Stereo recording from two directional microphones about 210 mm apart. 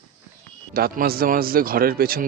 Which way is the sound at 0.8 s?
45° right (ahead or behind).